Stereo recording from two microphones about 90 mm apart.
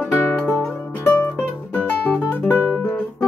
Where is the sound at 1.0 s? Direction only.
25° left (ahead or behind).